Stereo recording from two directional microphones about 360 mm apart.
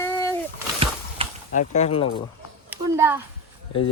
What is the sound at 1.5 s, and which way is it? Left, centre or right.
Speech, centre.